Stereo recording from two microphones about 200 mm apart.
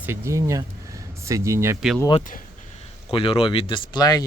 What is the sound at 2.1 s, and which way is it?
Speech, 40° left (ahead or behind).